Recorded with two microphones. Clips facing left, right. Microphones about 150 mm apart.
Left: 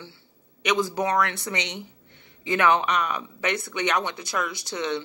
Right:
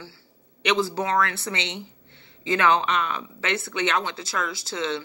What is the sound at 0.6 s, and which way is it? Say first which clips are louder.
Speech: even; 15° left (ahead or behind).